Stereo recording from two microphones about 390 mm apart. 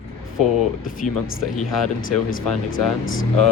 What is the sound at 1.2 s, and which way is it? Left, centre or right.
Speech, left.